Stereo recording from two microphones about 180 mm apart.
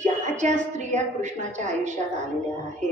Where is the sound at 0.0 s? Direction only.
40° right (ahead or behind).